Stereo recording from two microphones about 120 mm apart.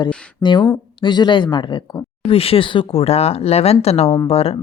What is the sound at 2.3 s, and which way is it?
Speech, 50° left (ahead or behind).